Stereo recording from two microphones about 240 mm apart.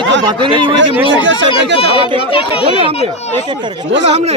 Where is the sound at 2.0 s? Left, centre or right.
Right.